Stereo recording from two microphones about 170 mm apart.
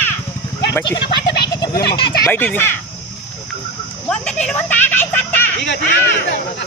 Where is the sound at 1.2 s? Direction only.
80° left.